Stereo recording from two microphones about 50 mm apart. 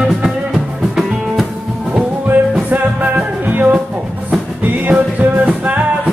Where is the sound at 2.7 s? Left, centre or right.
Right.